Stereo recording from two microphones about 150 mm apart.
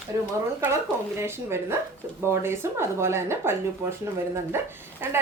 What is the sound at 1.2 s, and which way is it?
Speech, 15° right (ahead or behind).